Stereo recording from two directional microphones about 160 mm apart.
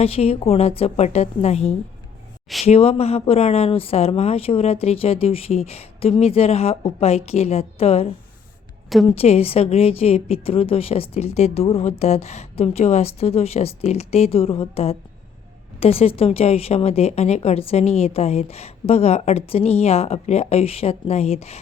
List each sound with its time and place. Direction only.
0.0 s a woman's voice: 40° left (ahead or behind)